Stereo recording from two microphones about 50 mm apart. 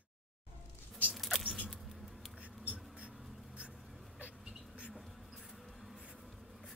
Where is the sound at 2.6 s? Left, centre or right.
Right.